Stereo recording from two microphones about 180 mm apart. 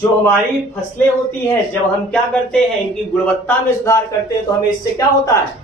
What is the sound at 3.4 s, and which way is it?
A woman's voice, 15° left (ahead or behind).